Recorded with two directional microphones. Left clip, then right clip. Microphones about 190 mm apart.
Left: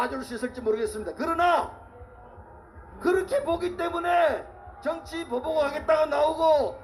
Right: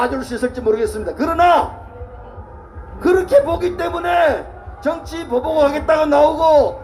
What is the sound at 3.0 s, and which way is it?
A man's voice, 25° left (ahead or behind).